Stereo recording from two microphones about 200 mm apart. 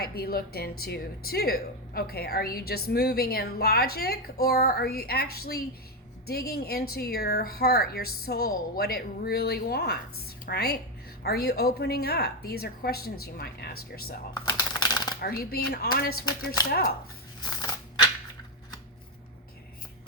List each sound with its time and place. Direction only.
0.0 s speech: 50° left (ahead or behind)
14.3 s typewriter: 20° left (ahead or behind)
15.2 s speech: 50° left (ahead or behind)
17.5 s a sound: 20° left (ahead or behind)